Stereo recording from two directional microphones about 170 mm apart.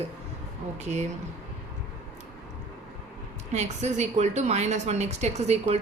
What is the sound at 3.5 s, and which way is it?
A woman's voice, 40° right (ahead or behind).